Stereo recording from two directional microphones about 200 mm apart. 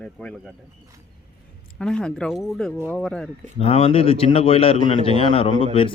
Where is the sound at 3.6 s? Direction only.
30° left (ahead or behind).